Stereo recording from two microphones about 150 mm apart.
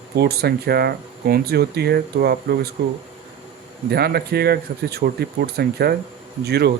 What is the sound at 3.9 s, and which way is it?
Speech, 90° right.